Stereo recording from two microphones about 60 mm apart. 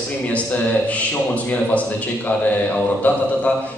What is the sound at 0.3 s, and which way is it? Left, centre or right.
A man's voice, left.